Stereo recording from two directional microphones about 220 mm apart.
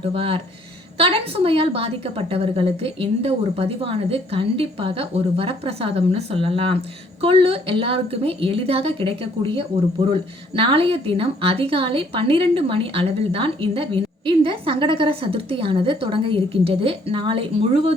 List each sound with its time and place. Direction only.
0.0 s a woman's voice: 25° right (ahead or behind)